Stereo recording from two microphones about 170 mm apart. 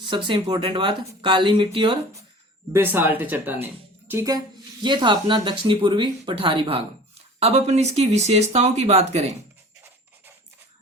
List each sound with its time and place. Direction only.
0.0 s speech: 30° right (ahead or behind)
2.7 s speech: 10° right (ahead or behind); by 9.3 s 40° right (ahead or behind)